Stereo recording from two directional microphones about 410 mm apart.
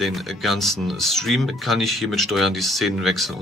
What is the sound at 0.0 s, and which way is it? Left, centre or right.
Speech, centre.